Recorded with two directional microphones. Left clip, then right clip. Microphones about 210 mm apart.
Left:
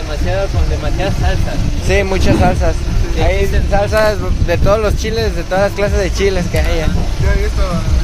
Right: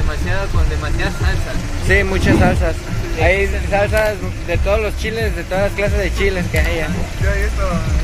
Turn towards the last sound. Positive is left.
turn(degrees=10)  # may be behind; listen again after turning